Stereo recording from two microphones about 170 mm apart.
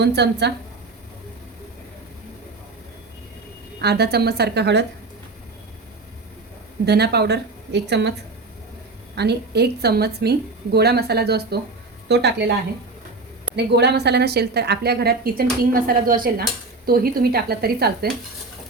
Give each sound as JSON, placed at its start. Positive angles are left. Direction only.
{"t": 0.0, "sound": "a woman's voice", "side_deg": -80}
{"t": 3.8, "sound": "a woman's voice", "side_deg": -75}
{"t": 6.8, "sound": "a woman's voice", "side_deg": -70}
{"t": 9.1, "sound": "a woman's voice", "side_deg": -75}
{"t": 12.0, "sound": "speech", "side_deg": -80}
{"t": 13.7, "sound": "a woman's voice", "side_deg": -75}